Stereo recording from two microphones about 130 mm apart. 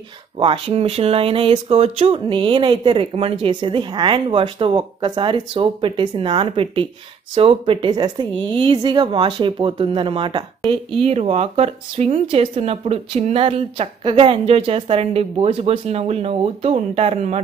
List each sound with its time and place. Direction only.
0.4 s speech: 40° right (ahead or behind)